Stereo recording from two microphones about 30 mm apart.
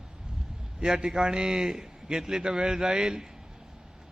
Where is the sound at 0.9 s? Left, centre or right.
Right.